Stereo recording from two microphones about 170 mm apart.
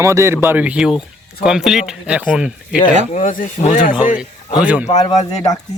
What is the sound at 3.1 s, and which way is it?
Speech, 50° left (ahead or behind).